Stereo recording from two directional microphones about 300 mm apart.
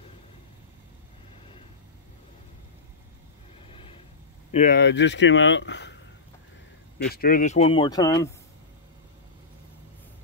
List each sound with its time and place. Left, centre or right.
3.6 s a sound: centre
4.5 s speech: left
7.1 s speech: left